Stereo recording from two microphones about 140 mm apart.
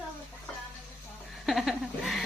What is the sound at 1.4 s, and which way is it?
Chuckle, centre (ahead or behind).